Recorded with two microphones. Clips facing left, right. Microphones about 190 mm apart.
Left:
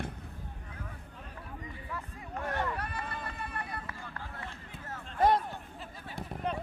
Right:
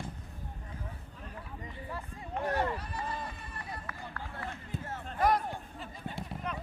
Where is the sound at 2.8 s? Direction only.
60° left (ahead or behind).